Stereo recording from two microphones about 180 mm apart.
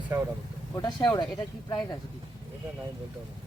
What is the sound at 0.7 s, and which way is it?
Speech, 25° left (ahead or behind).